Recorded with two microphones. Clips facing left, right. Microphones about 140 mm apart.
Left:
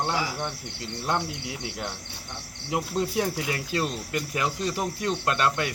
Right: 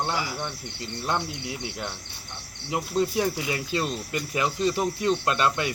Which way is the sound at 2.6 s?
Centre (ahead or behind).